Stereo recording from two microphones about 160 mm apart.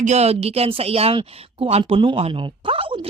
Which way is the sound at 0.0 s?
45° right (ahead or behind).